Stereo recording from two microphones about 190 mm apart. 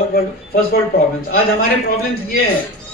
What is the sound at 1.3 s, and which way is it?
A man's voice, 50° left (ahead or behind).